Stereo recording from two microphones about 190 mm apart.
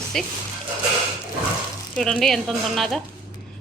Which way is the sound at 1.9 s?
5° left (ahead or behind).